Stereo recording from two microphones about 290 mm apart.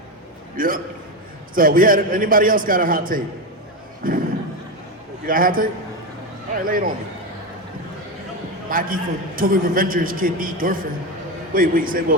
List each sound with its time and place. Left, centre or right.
0.5 s a man's voice: right
5.2 s a man's voice: right
8.7 s a man's voice: right